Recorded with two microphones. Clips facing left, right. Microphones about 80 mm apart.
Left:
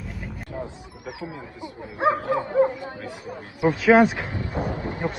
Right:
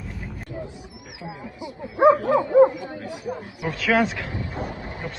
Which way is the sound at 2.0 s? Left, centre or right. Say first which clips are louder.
Right 5 dB; right.